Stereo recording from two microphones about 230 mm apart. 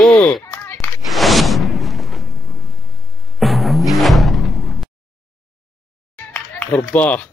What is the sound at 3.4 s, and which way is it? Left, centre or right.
Music, centre.